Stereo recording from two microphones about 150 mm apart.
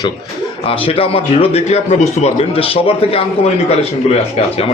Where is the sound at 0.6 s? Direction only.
40° left (ahead or behind).